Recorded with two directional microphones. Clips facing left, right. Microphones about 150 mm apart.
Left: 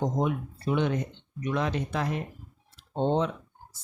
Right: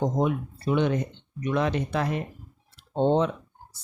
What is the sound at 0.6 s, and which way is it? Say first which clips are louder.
Speech: right 3 dB; 65° right (ahead or behind).